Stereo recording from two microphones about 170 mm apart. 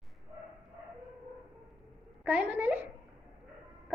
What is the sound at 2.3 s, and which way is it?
Speech, 10° right (ahead or behind).